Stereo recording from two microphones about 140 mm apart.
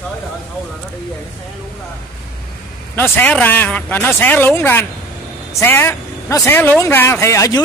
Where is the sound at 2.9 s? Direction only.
15° left (ahead or behind).